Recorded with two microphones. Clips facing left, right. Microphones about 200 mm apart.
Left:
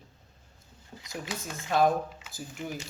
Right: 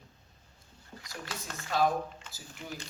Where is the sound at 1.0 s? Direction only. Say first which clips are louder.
Left 5 dB; 20° left (ahead or behind).